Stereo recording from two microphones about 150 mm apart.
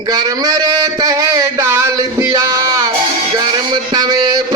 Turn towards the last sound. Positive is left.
turn(degrees=-25)  # may be behind; listen again after turning